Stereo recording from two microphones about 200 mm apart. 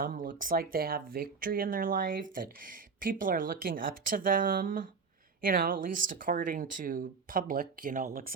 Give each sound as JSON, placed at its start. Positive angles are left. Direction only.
{"t": 0.0, "sound": "speech", "side_deg": -45}